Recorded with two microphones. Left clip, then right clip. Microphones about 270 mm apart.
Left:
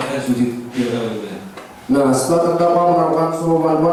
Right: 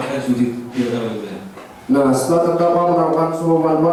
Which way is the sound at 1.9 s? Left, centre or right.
Centre.